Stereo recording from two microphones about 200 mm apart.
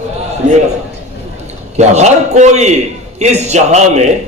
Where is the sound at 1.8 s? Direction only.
35° right (ahead or behind).